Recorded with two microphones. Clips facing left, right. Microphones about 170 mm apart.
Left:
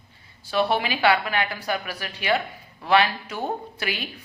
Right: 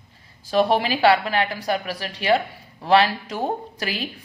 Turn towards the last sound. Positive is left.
turn(degrees=-35)  # may be behind; listen again after turning